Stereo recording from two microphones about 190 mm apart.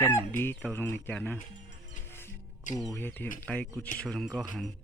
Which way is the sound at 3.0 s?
10° left (ahead or behind).